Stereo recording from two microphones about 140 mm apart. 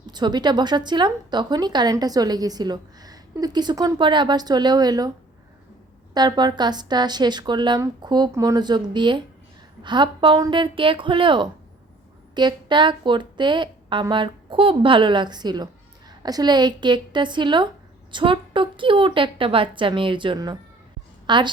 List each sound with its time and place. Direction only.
0.0 s a woman's voice: 30° right (ahead or behind)
6.1 s a woman's voice: 30° right (ahead or behind)